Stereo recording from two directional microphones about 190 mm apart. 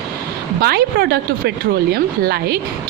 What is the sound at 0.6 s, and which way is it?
Speech, 55° right (ahead or behind).